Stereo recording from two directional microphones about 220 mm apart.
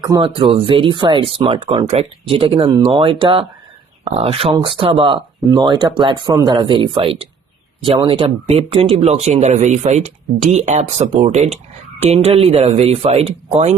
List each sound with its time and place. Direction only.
0.0 s speech: 20° right (ahead or behind)